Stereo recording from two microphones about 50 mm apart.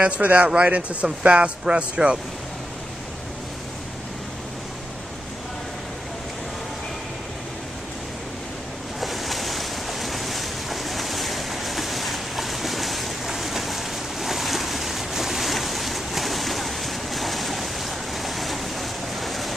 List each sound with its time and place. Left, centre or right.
0.0 s speech: right
9.0 s boat: centre